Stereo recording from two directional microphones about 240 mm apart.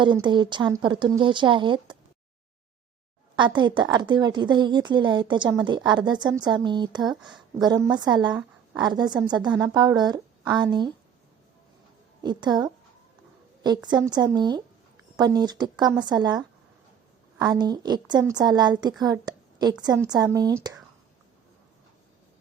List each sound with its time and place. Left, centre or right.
0.3 s a woman's voice: centre
3.3 s a woman's voice: centre
7.2 s a woman's voice: centre
7.6 s a woman's voice: centre
12.2 s a woman's voice: centre